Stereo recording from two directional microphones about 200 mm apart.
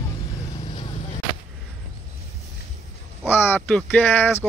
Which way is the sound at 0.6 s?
35° left (ahead or behind).